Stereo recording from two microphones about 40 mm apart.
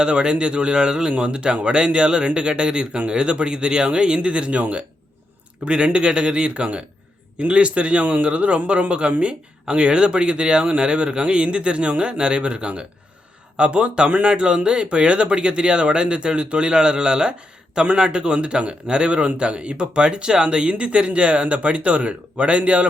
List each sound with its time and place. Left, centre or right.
0.0 s speech: right